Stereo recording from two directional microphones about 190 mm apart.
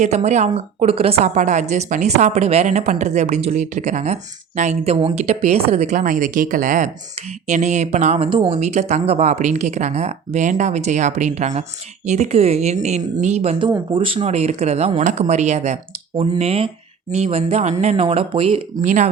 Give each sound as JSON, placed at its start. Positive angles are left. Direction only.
{"t": 0.0, "sound": "a woman's voice", "side_deg": -35}
{"t": 13.7, "sound": "speech", "side_deg": -15}
{"t": 14.0, "sound": "a woman's voice", "side_deg": -30}